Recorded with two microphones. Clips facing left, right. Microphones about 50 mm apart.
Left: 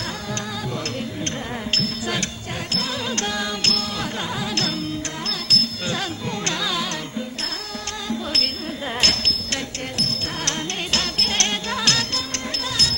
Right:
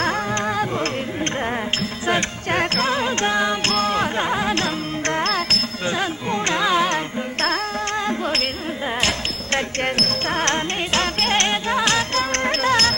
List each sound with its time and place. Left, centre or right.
1.7 s music: right
5.2 s music: right
5.9 s carnatic music: right
8.0 s music: right
9.0 s a sound: centre
9.8 s music: right
11.7 s music: right
12.1 s music: right